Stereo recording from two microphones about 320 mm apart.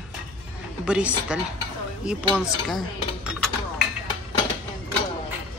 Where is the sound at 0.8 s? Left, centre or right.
Centre.